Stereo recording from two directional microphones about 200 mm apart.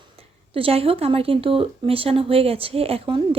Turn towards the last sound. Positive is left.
turn(degrees=-30)  # may be behind; listen again after turning